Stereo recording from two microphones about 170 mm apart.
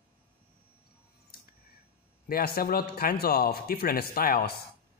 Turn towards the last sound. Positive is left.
turn(degrees=65)  # may be behind; listen again after turning